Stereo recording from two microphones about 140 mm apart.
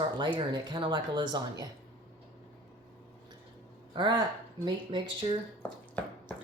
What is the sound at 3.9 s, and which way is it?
Speech, 35° right (ahead or behind).